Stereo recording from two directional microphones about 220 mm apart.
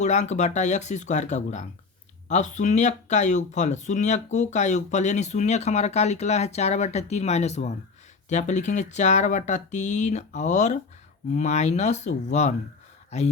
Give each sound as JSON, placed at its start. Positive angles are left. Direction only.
{"t": 0.0, "sound": "speech", "side_deg": 30}